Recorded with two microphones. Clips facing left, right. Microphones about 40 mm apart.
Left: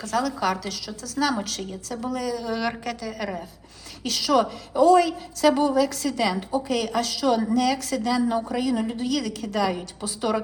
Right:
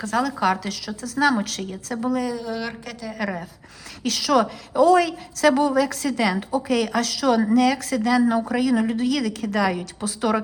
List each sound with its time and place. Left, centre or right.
0.0 s a woman's voice: right
2.4 s speech: centre
4.0 s a woman's voice: right
7.5 s a woman's voice: right